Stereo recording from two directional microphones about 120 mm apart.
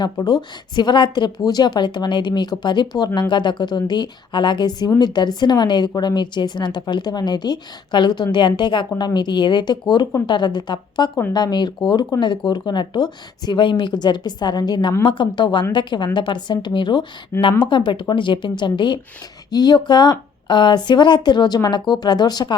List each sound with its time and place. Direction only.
0.0 s a woman's voice: 35° left (ahead or behind)
17.3 s a woman's voice: 20° left (ahead or behind)
17.7 s a woman's voice: 40° left (ahead or behind)